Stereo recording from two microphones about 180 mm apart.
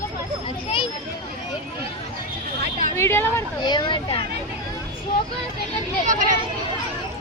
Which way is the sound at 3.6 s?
25° left (ahead or behind).